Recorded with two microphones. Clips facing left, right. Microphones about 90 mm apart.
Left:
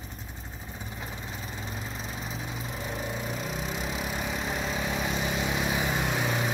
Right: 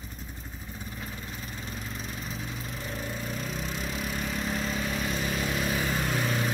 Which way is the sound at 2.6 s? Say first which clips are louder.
Left 2 dB; 20° left (ahead or behind).